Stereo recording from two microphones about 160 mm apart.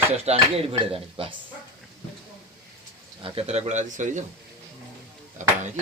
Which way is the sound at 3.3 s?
40° right (ahead or behind).